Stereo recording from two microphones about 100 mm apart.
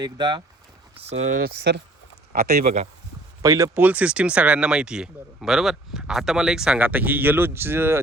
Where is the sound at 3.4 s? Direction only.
35° right (ahead or behind).